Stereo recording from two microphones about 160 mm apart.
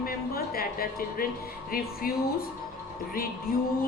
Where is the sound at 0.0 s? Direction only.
65° left (ahead or behind).